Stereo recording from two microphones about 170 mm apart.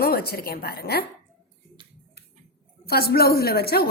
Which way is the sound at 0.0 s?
65° left (ahead or behind).